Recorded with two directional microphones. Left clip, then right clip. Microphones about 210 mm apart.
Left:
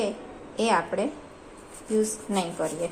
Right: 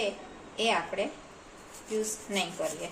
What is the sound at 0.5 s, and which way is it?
Speech, 25° left (ahead or behind).